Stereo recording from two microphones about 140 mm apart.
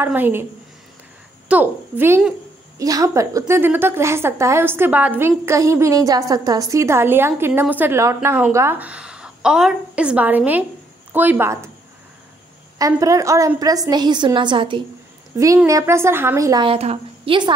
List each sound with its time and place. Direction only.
0.0 s a woman's voice: 15° right (ahead or behind)
1.5 s a woman's voice: 15° right (ahead or behind)
12.7 s a woman's voice: 25° right (ahead or behind)
15.3 s a woman's voice: 20° right (ahead or behind)
16.6 s a woman's voice: 45° right (ahead or behind)